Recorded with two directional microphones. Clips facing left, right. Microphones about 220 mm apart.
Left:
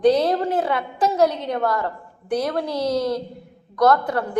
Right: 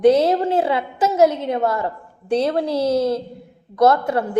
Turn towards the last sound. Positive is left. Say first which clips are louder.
# right 2 dB
turn(degrees=-25)  # may be behind; listen again after turning